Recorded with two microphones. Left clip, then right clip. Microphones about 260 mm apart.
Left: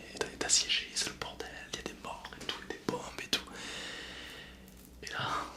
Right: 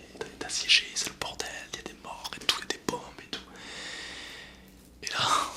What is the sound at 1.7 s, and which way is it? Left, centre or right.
Whispering, centre.